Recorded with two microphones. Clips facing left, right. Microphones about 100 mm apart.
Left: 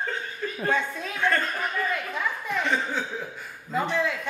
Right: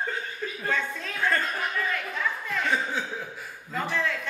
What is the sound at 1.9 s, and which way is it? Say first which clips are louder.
Speech: left 1 dB; 15° left (ahead or behind).